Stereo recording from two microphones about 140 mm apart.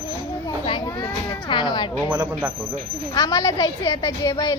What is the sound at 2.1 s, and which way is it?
Speech, 15° right (ahead or behind).